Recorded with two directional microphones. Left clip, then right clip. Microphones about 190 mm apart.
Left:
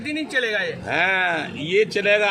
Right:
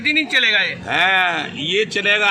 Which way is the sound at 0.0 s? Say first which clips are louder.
Right 8 dB; 45° left (ahead or behind).